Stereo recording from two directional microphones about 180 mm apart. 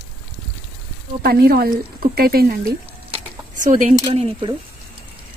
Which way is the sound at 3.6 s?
45° right (ahead or behind).